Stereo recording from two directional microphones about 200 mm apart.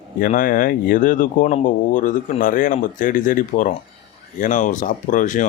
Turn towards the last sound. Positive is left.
turn(degrees=40)  # may be behind; listen again after turning